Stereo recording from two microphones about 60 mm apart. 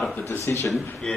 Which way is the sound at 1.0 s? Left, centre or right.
Centre.